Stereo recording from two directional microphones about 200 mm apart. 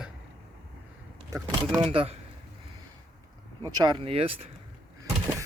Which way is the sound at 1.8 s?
30° right (ahead or behind).